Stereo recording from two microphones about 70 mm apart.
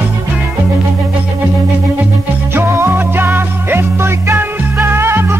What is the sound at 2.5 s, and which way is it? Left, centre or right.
Music, right.